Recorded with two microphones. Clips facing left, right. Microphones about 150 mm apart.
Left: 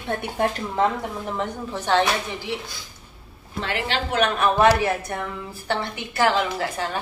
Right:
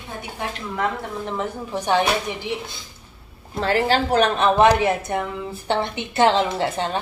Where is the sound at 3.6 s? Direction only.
40° right (ahead or behind).